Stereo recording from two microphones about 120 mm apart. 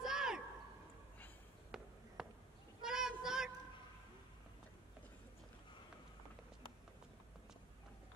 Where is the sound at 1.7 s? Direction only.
5° right (ahead or behind).